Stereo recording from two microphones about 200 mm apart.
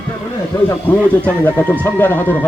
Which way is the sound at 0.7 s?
10° left (ahead or behind).